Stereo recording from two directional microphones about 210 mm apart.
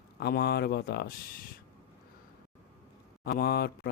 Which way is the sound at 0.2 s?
50° left (ahead or behind).